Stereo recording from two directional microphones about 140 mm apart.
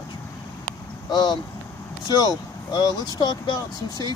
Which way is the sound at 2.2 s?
30° left (ahead or behind).